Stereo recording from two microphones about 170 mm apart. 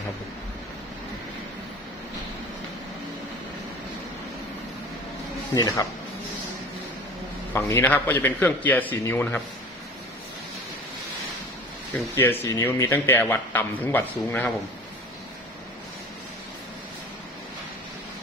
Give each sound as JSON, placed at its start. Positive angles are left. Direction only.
{"t": 5.5, "sound": "speech", "side_deg": 20}
{"t": 7.5, "sound": "a man's voice", "side_deg": 15}
{"t": 12.1, "sound": "a man's voice", "side_deg": 15}